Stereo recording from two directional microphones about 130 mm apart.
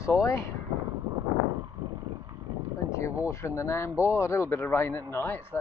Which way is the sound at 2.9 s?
25° left (ahead or behind).